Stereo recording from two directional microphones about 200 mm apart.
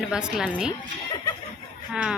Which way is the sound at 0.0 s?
5° right (ahead or behind).